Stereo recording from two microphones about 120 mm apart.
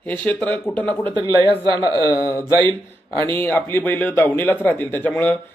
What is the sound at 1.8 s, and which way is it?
Speech, 25° left (ahead or behind).